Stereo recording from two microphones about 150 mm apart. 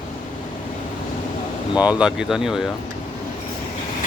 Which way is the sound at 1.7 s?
5° right (ahead or behind).